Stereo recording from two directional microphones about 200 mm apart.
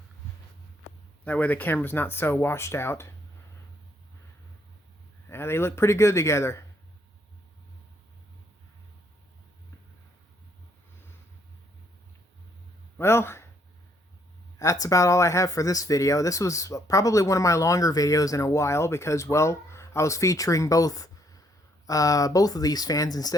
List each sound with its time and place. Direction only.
1.2 s speech: 5° left (ahead or behind)
5.3 s speech: 10° left (ahead or behind)
13.0 s speech: 10° left (ahead or behind)
14.6 s speech: 15° left (ahead or behind)